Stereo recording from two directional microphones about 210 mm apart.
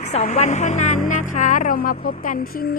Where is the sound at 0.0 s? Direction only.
30° left (ahead or behind).